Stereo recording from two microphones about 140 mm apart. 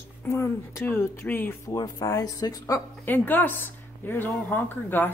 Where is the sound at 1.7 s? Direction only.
25° left (ahead or behind).